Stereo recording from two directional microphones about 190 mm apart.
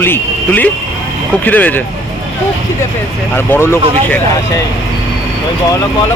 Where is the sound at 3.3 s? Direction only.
10° left (ahead or behind).